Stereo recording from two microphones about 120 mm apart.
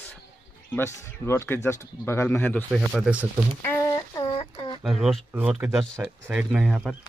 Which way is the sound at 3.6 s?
20° left (ahead or behind).